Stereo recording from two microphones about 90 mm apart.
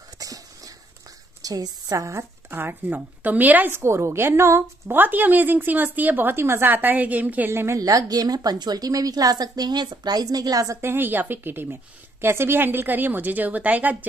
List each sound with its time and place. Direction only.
0.2 s a sound: 40° right (ahead or behind)
1.4 s a woman's voice: 45° right (ahead or behind)
2.5 s a woman's voice: 20° right (ahead or behind)
7.8 s a woman's voice: 40° right (ahead or behind); by 13.9 s 20° right (ahead or behind)